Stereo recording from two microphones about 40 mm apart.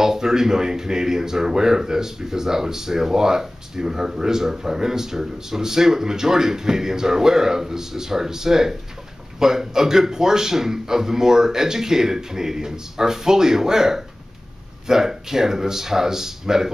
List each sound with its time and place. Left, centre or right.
0.0 s speech: centre